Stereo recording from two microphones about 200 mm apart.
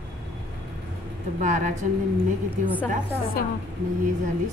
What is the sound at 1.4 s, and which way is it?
Speech, 40° right (ahead or behind).